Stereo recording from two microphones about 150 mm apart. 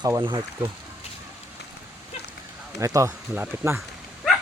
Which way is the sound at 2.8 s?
20° right (ahead or behind).